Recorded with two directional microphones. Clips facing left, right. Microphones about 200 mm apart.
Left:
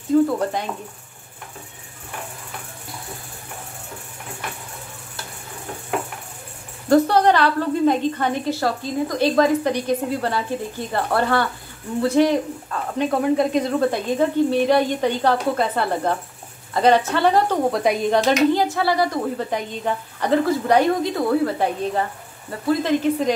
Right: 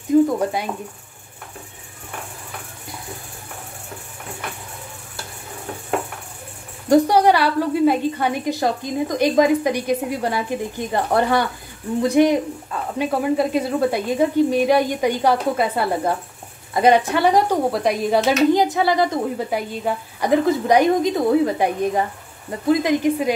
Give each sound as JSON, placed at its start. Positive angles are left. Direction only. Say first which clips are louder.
{"t": 0.1, "sound": "a sound", "louder": "right 2 dB", "side_deg": -10}
{"t": 6.9, "sound": "a woman's voice", "louder": "right 1 dB", "side_deg": -10}
{"t": 18.5, "sound": "a woman's voice", "louder": "right 2 dB", "side_deg": -15}